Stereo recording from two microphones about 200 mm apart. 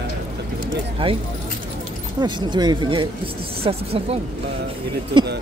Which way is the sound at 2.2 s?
20° right (ahead or behind).